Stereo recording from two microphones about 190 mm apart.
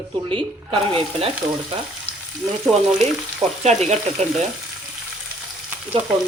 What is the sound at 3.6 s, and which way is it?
Speech, 35° right (ahead or behind).